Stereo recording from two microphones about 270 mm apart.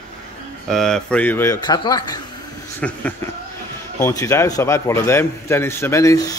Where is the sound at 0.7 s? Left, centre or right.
Centre.